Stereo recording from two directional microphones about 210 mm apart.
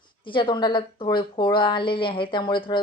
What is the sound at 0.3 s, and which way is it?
Speech, 25° left (ahead or behind).